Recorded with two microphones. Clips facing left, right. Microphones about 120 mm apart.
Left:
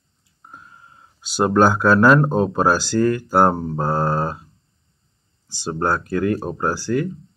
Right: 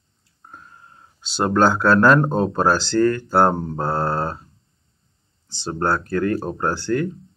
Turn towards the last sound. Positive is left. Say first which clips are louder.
# even
turn(degrees=5)  # may be behind; listen again after turning